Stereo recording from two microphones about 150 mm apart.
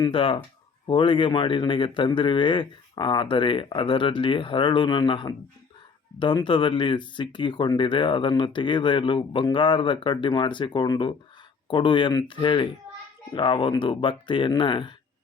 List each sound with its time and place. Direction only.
0.0 s speech: 35° left (ahead or behind)